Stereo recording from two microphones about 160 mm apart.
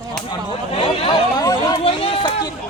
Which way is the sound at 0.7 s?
30° left (ahead or behind).